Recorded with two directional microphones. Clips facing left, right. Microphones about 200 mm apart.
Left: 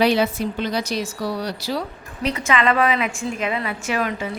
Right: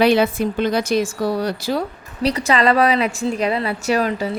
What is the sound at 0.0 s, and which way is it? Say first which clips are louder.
A woman's voice: right 3 dB; 55° right (ahead or behind).